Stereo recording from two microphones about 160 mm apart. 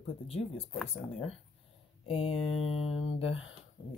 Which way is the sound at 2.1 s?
35° left (ahead or behind).